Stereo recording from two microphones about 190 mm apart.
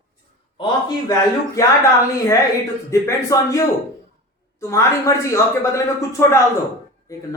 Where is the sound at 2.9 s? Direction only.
15° left (ahead or behind).